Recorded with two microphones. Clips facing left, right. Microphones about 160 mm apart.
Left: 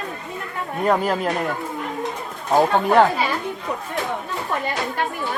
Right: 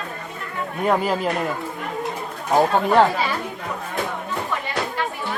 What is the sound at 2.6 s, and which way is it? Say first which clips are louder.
Speech: left 1 dB; centre (ahead or behind).